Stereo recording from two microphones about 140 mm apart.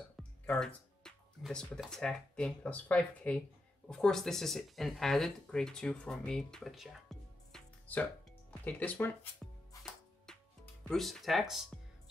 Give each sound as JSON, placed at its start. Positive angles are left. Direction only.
{"t": 0.1, "sound": "speech", "side_deg": 5}
{"t": 10.2, "sound": "music", "side_deg": 5}